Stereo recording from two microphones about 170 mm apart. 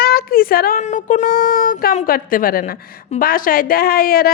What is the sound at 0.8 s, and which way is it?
A woman's voice, 45° left (ahead or behind).